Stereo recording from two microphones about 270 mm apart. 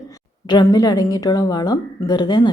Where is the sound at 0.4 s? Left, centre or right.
Centre.